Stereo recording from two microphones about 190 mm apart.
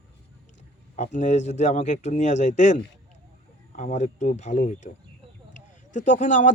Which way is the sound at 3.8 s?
40° left (ahead or behind).